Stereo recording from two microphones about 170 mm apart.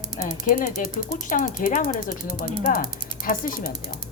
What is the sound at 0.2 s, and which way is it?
Speech, 50° left (ahead or behind).